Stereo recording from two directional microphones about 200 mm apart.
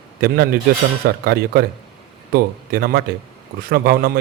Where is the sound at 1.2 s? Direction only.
50° right (ahead or behind).